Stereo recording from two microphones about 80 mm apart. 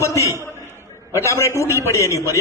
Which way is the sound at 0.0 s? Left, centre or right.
Left.